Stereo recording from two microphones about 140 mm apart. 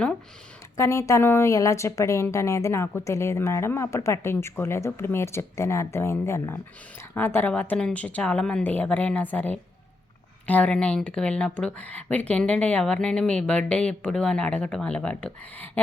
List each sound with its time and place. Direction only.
0.8 s a woman's voice: 20° left (ahead or behind)